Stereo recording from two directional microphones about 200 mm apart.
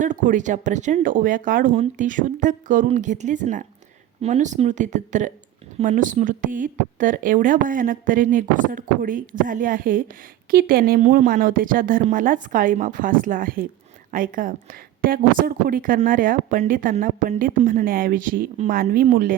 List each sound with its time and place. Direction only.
0.0 s a woman's voice: 40° right (ahead or behind)